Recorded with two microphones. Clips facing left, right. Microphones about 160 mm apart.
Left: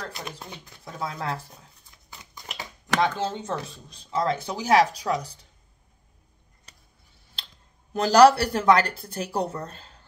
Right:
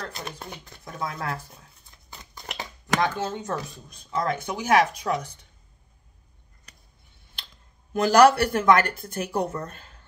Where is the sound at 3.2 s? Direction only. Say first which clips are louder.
Even; 25° left (ahead or behind).